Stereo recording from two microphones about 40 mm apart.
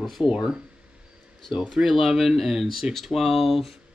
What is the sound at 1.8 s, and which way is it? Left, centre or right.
Speech, right.